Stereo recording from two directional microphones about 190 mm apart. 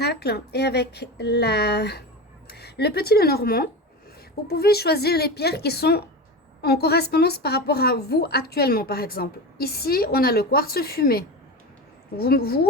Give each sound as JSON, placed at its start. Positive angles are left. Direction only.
{"t": 0.0, "sound": "a woman's voice", "side_deg": 60}